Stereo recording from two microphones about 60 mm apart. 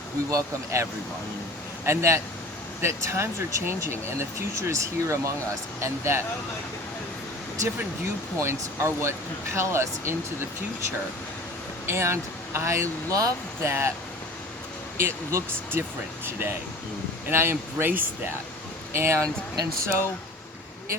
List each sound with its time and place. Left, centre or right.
0.3 s speech: right
1.8 s speech: right
8.0 s speech: right
11.9 s speech: right
13.6 s speech: right
14.9 s speech: right